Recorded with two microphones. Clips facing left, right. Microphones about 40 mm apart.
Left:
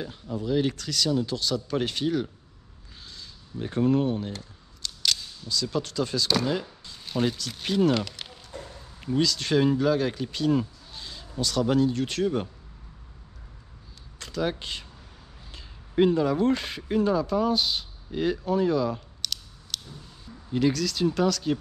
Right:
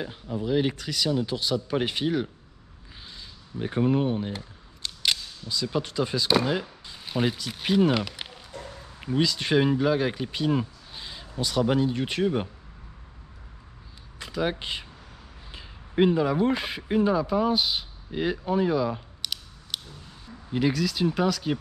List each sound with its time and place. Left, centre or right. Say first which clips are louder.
0.0 s speech: right 1 dB; centre
14.1 s speech: right 1 dB; centre